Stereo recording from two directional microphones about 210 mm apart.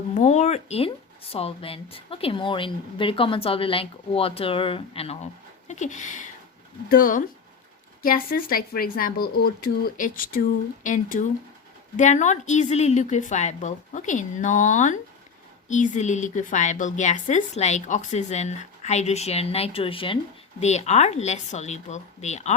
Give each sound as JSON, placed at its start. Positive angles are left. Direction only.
{"t": 0.1, "sound": "a woman's voice", "side_deg": 30}